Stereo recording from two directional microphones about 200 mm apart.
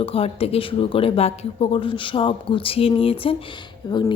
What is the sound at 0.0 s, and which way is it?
Speech, 30° left (ahead or behind).